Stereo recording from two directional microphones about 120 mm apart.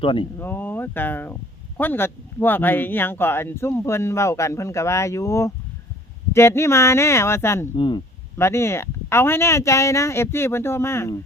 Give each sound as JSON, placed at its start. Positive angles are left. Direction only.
{"t": 0.0, "sound": "speech", "side_deg": 45}
{"t": 0.3, "sound": "speech", "side_deg": 15}
{"t": 7.8, "sound": "speech", "side_deg": 40}
{"t": 8.4, "sound": "speech", "side_deg": 20}